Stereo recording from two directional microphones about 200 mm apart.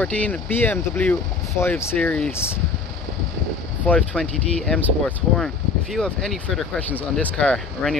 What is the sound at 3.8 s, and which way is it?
Speech, 5° left (ahead or behind).